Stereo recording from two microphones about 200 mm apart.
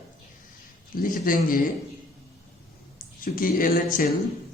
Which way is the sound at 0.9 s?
45° left (ahead or behind).